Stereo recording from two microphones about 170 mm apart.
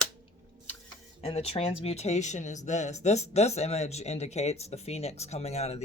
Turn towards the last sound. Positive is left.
turn(degrees=40)  # may be behind; listen again after turning